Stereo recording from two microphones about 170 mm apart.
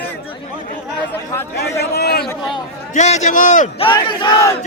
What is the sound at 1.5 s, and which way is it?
Speech, 75° left (ahead or behind).